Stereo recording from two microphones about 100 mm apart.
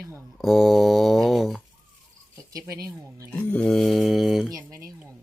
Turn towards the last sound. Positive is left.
turn(degrees=0)  # may be behind; listen again after turning